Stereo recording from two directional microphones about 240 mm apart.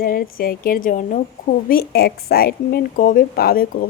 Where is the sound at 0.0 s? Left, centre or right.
Left.